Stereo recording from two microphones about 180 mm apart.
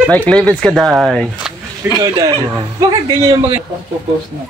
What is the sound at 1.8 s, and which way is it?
Speech, 10° right (ahead or behind).